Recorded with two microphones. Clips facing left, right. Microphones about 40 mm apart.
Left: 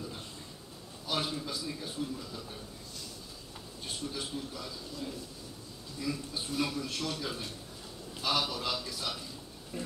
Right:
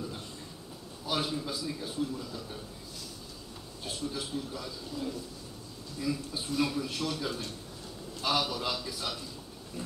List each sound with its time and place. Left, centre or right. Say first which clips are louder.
1.0 s a man's voice: right 2 dB; centre
3.8 s a man's voice: right 2 dB; centre
9.7 s wild animals: left 1 dB; centre